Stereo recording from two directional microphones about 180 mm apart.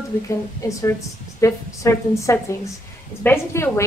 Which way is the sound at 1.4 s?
15° left (ahead or behind).